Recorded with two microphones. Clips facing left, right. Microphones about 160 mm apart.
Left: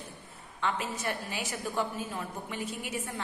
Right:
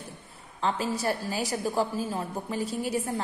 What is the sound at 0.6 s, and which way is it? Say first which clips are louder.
A woman's voice: right 5 dB; 35° right (ahead or behind).